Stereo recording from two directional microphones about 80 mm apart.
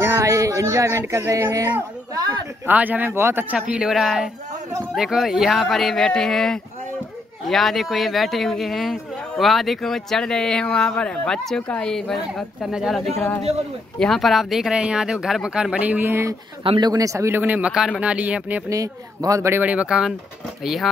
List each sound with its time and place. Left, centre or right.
0.0 s speech: right
2.1 s a woman's voice: right
2.6 s speech: right
3.5 s a woman's voice: centre
12.7 s speech: centre
13.9 s speech: centre; by 16.3 s right
16.6 s speech: right
16.9 s speech: right
17.3 s speech: right
17.7 s speech: centre
18.0 s speech: centre
18.7 s speech: right
19.5 s speech: centre
20.6 s speech: centre